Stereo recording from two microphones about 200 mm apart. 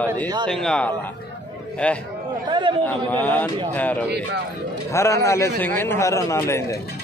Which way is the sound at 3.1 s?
10° left (ahead or behind).